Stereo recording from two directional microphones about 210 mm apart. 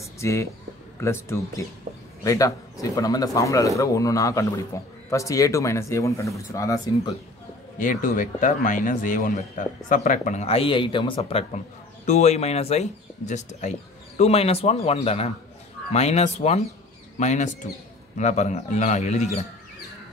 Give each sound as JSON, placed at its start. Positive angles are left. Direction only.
{"t": 0.0, "sound": "a sound", "side_deg": 15}
{"t": 1.0, "sound": "speech", "side_deg": 15}
{"t": 7.8, "sound": "speech", "side_deg": 40}